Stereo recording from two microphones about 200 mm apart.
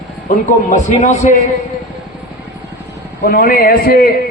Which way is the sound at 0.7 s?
35° left (ahead or behind).